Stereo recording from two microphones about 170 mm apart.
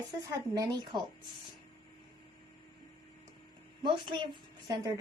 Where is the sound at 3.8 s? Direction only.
25° right (ahead or behind).